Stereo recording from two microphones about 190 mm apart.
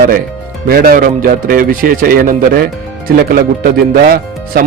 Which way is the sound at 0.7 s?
50° right (ahead or behind).